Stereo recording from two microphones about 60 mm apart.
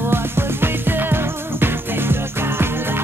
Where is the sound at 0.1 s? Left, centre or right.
Right.